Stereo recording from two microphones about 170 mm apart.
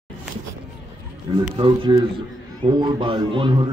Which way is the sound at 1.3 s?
25° right (ahead or behind).